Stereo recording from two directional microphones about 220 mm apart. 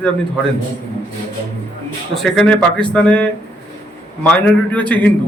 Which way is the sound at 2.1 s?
Centre (ahead or behind).